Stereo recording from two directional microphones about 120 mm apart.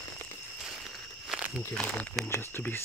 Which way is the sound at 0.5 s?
Centre (ahead or behind).